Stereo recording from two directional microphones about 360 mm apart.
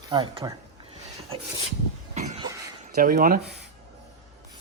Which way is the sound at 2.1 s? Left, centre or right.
Centre.